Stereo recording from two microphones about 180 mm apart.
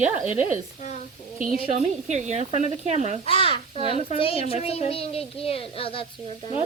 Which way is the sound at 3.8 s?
30° right (ahead or behind).